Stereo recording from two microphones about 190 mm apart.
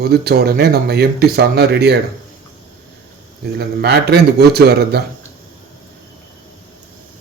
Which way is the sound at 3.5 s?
60° right (ahead or behind).